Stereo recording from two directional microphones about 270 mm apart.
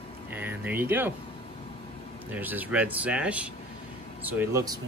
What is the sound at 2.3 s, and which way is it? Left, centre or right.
A man's voice, centre.